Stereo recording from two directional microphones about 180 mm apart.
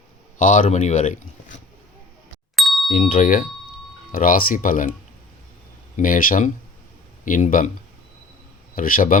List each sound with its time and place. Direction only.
0.3 s speech: 45° left (ahead or behind)
2.6 s ding: centre (ahead or behind)
2.9 s speech: 45° left (ahead or behind)
6.0 s speech: 50° left (ahead or behind)
8.7 s a man's voice: 50° left (ahead or behind)